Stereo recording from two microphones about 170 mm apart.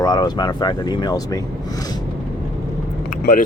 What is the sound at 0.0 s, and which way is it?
Speech, 25° left (ahead or behind).